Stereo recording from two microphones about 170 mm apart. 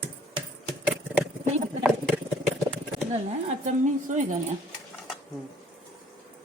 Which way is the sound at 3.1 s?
45° right (ahead or behind).